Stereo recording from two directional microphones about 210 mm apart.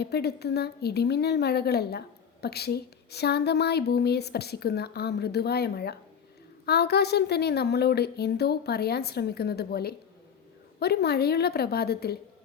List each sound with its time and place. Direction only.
0.0 s a woman's voice: 50° left (ahead or behind)